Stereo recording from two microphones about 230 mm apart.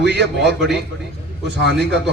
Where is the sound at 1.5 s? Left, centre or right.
Right.